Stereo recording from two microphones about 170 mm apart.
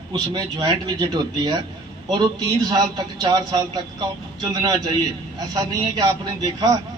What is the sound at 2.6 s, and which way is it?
Speech, 20° right (ahead or behind).